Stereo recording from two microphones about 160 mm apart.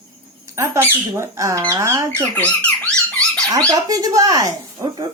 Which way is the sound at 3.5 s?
20° right (ahead or behind).